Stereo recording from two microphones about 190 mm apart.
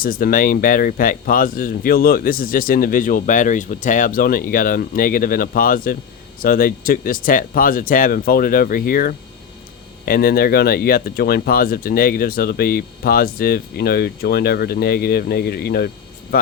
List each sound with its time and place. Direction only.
0.0 s speech: 50° left (ahead or behind)